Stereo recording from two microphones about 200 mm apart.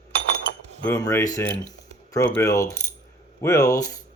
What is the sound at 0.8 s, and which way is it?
Speech, 15° left (ahead or behind).